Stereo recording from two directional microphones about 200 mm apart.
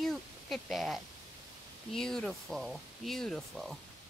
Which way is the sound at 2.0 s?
Centre (ahead or behind).